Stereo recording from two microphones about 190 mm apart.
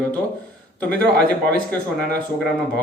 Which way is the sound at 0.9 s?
5° left (ahead or behind).